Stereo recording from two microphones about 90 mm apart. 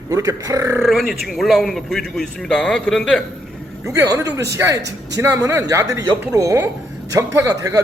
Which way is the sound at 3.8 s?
35° right (ahead or behind).